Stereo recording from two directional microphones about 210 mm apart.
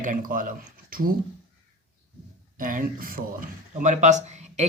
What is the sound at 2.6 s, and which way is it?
Speech, 40° right (ahead or behind).